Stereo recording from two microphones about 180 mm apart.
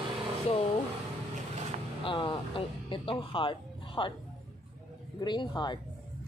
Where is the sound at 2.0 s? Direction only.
30° left (ahead or behind).